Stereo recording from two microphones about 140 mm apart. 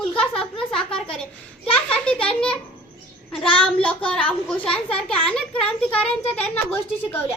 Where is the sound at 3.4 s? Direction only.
40° left (ahead or behind).